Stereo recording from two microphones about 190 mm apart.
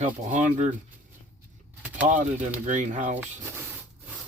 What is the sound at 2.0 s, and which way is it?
Speech, 40° right (ahead or behind).